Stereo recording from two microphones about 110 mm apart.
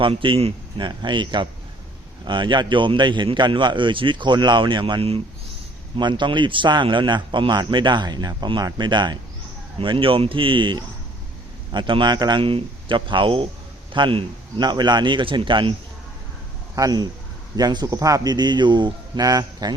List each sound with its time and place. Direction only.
0.0 s a man's voice: 50° right (ahead or behind)
6.0 s a man's voice: 45° right (ahead or behind)
16.7 s a man's voice: 35° right (ahead or behind)